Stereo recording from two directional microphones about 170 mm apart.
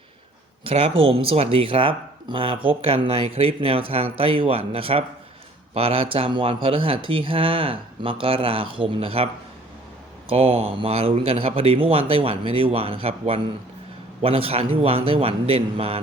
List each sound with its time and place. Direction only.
0.6 s speech: 35° right (ahead or behind)